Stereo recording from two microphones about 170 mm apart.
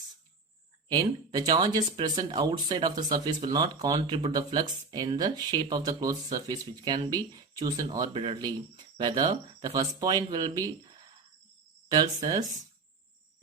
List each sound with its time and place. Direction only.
0.9 s speech: 25° right (ahead or behind)
11.9 s speech: 20° right (ahead or behind)